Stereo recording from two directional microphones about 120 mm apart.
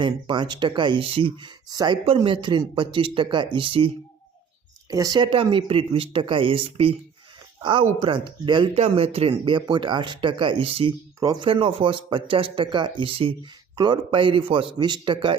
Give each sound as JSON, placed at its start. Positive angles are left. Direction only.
{"t": 0.0, "sound": "speech", "side_deg": -40}
{"t": 4.9, "sound": "speech", "side_deg": -30}
{"t": 5.2, "sound": "speech", "side_deg": -45}
{"t": 8.7, "sound": "speech", "side_deg": -60}
{"t": 9.4, "sound": "speech", "side_deg": -40}
{"t": 11.2, "sound": "speech", "side_deg": -30}
{"t": 11.4, "sound": "speech", "side_deg": -50}